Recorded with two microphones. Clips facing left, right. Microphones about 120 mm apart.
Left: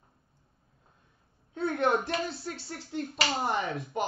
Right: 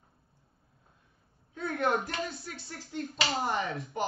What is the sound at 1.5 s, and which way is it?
A child's voice, 30° left (ahead or behind).